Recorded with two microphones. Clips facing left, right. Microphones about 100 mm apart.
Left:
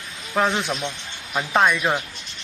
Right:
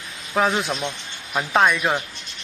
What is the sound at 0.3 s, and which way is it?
Speech, centre (ahead or behind).